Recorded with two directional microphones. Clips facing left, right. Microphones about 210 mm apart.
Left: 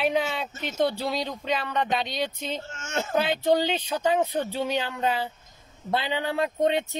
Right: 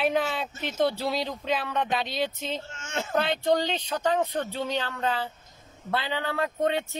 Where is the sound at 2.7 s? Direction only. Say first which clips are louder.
Left 3 dB; 45° left (ahead or behind).